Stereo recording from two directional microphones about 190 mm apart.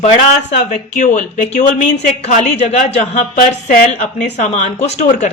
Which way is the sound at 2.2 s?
35° left (ahead or behind).